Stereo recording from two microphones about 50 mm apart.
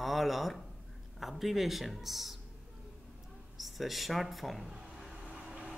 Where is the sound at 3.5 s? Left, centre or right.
Centre.